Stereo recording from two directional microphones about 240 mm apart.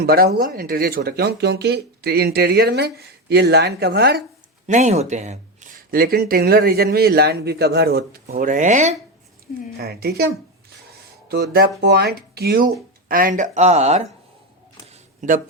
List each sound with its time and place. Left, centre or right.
0.0 s speech: right
4.6 s speech: right
9.7 s speech: right
11.8 s speech: right
14.8 s a sound: right